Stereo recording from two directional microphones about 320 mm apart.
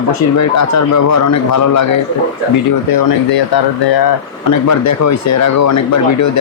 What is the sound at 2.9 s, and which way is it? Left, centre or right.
Speech, left.